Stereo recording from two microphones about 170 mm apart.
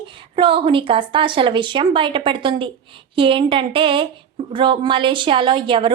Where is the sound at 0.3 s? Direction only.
30° right (ahead or behind).